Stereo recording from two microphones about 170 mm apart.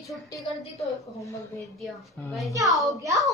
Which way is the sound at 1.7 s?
Centre (ahead or behind).